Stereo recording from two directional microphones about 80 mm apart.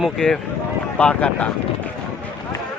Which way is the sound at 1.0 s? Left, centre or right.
Centre.